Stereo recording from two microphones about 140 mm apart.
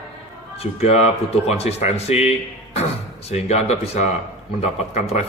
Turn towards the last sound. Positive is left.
turn(degrees=50)  # may be behind; listen again after turning